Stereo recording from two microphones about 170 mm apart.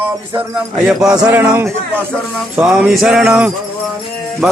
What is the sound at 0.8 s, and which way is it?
Speech, 5° right (ahead or behind).